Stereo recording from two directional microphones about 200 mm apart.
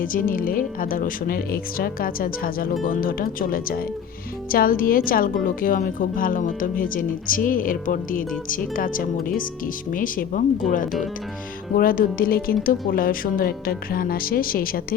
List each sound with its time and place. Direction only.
0.0 s a woman's voice: 45° left (ahead or behind)